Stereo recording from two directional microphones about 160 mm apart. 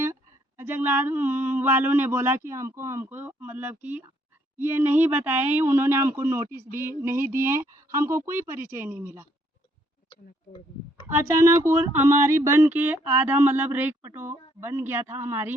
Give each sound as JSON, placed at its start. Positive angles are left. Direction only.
{"t": 0.0, "sound": "a sound", "side_deg": -15}
{"t": 4.5, "sound": "speech", "side_deg": -15}
{"t": 11.1, "sound": "speech", "side_deg": -15}